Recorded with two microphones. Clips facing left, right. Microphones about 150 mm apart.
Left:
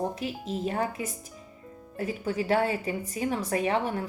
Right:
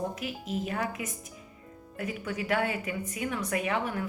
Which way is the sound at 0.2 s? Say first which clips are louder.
Left 2 dB; 30° left (ahead or behind).